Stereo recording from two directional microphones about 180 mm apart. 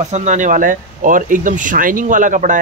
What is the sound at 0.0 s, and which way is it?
Speech, 40° right (ahead or behind).